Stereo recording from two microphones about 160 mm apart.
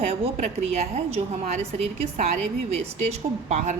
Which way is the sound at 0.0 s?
45° right (ahead or behind).